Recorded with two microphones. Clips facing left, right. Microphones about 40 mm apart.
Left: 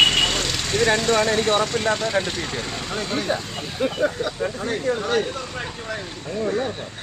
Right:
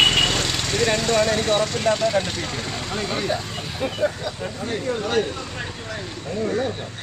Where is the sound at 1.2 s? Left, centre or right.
Left.